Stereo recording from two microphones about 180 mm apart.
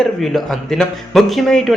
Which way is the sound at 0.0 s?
Centre (ahead or behind).